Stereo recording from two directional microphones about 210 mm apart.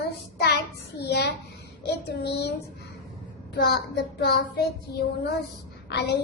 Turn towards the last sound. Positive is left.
turn(degrees=55)  # may be behind; listen again after turning